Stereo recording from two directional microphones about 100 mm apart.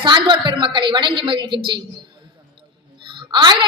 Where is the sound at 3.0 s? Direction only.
50° right (ahead or behind).